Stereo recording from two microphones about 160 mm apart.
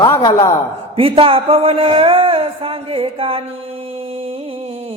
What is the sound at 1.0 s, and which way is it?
Mantra, 35° right (ahead or behind).